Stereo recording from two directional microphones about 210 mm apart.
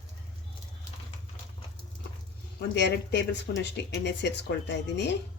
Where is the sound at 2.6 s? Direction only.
55° left (ahead or behind).